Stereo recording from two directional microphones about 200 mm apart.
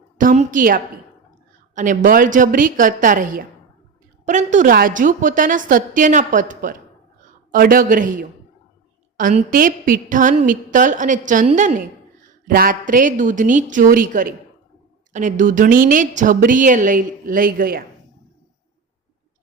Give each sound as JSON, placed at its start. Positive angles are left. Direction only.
{"t": 0.2, "sound": "a woman's voice", "side_deg": -40}